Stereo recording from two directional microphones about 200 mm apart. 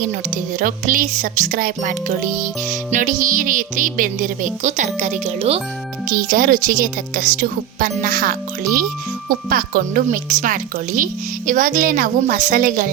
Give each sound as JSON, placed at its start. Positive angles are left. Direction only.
{"t": 0.6, "sound": "music", "side_deg": -40}
{"t": 6.1, "sound": "a woman's voice", "side_deg": -45}